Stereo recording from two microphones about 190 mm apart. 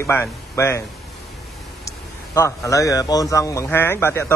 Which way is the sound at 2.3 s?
15° left (ahead or behind).